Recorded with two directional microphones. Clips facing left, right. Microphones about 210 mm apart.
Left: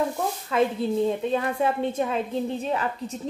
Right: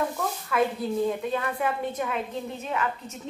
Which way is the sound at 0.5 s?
25° left (ahead or behind).